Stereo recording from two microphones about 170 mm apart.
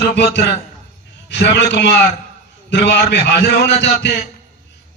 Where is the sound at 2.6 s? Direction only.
85° left.